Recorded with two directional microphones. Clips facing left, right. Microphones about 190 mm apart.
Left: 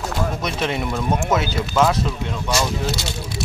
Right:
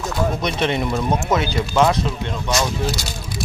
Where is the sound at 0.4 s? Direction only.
5° left (ahead or behind).